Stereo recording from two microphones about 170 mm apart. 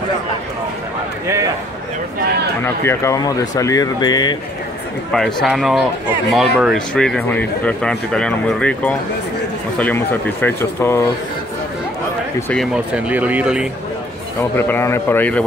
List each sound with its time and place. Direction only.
1.2 s a sound: 15° right (ahead or behind)
2.6 s speech: 15° left (ahead or behind)
5.1 s speech: centre (ahead or behind)
12.5 s speech: 5° right (ahead or behind)
14.6 s speech: 15° left (ahead or behind)